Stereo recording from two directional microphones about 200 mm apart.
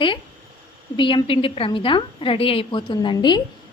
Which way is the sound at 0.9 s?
25° left (ahead or behind).